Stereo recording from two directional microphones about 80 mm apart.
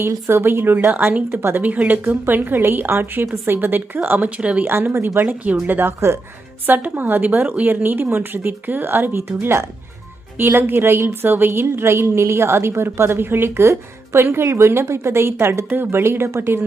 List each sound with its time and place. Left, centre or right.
0.0 s a woman's voice: right; by 4.6 s centre
4.6 s a woman's voice: right
6.7 s a woman's voice: centre